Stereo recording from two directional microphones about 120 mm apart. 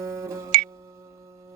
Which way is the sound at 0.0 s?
25° right (ahead or behind).